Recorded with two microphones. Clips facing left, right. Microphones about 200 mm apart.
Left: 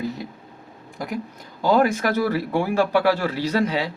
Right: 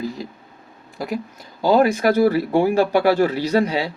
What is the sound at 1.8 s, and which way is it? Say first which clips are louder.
Speech: right 5 dB; 40° right (ahead or behind).